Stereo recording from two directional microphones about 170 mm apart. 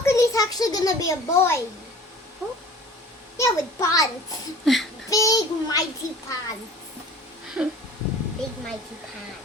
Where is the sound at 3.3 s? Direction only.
20° left (ahead or behind).